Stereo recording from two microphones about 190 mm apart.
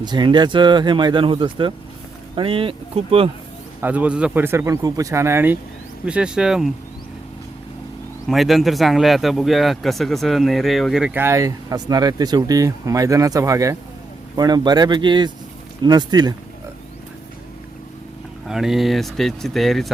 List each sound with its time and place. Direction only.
0.0 s speech: 25° right (ahead or behind)
3.8 s a man's voice: 10° right (ahead or behind)
8.3 s speech: centre (ahead or behind); by 16.3 s 20° right (ahead or behind)
18.4 s speech: centre (ahead or behind)